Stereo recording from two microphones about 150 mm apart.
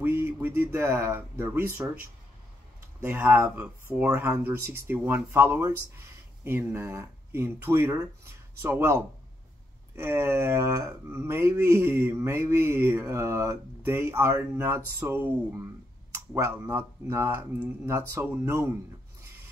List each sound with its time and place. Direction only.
0.0 s speech: 15° right (ahead or behind)